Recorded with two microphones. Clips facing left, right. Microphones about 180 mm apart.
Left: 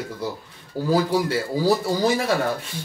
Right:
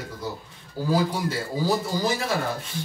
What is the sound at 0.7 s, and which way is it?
Speech, 70° left (ahead or behind).